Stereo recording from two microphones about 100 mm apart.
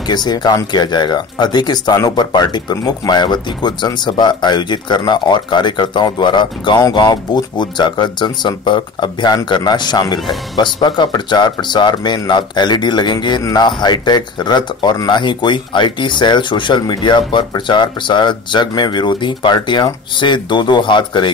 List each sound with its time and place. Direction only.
0.1 s speech: 45° left (ahead or behind)